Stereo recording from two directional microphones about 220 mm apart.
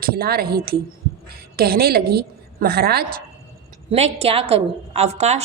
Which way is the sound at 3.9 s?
30° right (ahead or behind).